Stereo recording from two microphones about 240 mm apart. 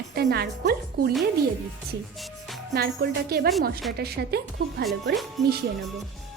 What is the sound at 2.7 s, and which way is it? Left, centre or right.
A woman's voice, right.